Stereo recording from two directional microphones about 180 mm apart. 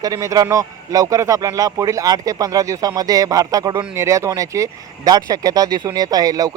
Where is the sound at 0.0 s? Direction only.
20° right (ahead or behind).